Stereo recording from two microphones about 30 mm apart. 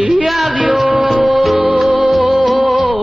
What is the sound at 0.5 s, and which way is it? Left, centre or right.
Music, right.